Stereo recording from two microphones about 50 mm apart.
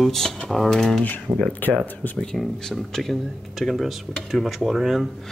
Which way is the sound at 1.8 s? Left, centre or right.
Left.